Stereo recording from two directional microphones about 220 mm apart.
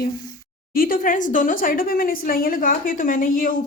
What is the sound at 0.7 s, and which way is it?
A woman's voice, 40° left (ahead or behind).